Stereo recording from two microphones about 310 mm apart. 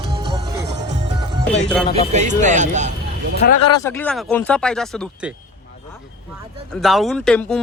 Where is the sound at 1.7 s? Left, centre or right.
Centre.